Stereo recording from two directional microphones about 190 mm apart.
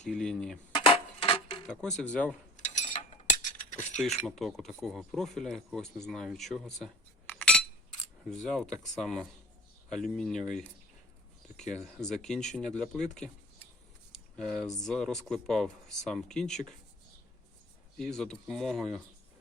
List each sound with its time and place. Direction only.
0.0 s speech: 5° left (ahead or behind)
0.7 s a sound: 30° left (ahead or behind)
1.6 s speech: 5° left (ahead or behind)
2.6 s cutlery: 40° left (ahead or behind)
4.3 s speech: centre (ahead or behind)
17.9 s speech: centre (ahead or behind)